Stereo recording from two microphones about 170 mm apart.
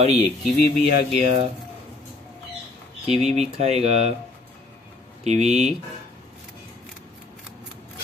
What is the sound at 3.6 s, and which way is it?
Speech, 40° right (ahead or behind).